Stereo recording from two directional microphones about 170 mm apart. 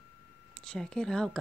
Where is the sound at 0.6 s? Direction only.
5° left (ahead or behind).